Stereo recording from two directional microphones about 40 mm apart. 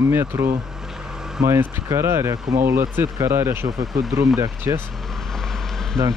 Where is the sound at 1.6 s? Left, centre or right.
Right.